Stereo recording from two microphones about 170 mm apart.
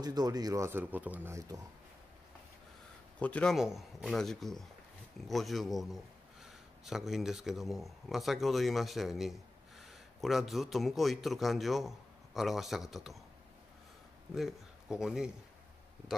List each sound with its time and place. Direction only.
0.0 s speech: 25° right (ahead or behind)
3.2 s speech: 5° left (ahead or behind)
14.3 s speech: centre (ahead or behind)